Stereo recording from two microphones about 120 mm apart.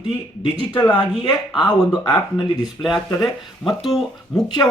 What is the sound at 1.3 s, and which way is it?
Speech, 40° left (ahead or behind).